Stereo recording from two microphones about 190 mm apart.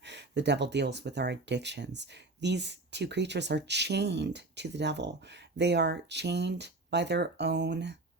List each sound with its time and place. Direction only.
0.0 s speech: 65° right (ahead or behind)